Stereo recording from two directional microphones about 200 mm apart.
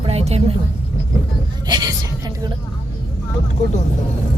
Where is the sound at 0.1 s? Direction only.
30° right (ahead or behind).